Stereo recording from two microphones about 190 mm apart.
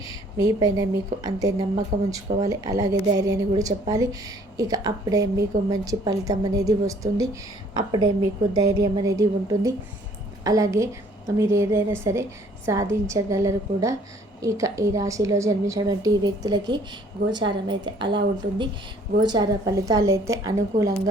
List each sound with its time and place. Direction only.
0.0 s a woman's voice: 20° right (ahead or behind)